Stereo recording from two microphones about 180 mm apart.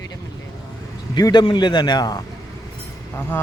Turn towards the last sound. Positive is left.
turn(degrees=10)  # may be behind; listen again after turning